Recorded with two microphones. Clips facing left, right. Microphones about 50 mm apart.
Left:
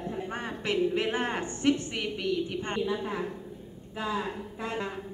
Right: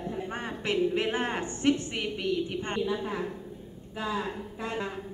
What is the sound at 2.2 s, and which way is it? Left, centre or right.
Speech, centre.